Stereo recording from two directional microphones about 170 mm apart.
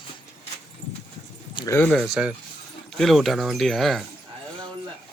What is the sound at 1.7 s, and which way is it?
Speech, 5° left (ahead or behind).